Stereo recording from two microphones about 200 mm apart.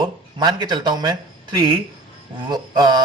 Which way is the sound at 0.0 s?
20° right (ahead or behind).